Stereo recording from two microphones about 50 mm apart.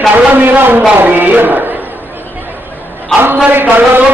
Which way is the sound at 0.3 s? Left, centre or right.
Right.